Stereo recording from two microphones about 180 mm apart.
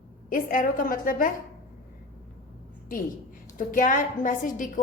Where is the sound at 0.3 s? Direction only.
50° left (ahead or behind).